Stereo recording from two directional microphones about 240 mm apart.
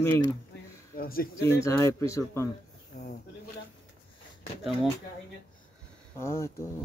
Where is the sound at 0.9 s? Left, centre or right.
Left.